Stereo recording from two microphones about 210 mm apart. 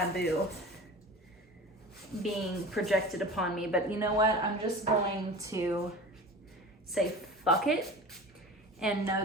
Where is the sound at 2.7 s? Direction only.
Centre (ahead or behind).